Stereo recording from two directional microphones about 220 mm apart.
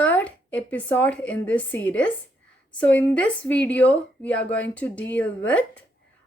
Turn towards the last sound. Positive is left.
turn(degrees=5)  # may be behind; listen again after turning